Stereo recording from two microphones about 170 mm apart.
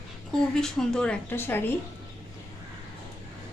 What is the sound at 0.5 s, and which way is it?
A woman's voice, 5° left (ahead or behind).